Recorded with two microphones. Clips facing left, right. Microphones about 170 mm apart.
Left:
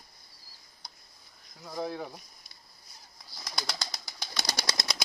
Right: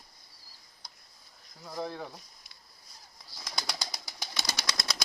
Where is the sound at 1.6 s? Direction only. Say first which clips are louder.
Left 2 dB; 5° left (ahead or behind).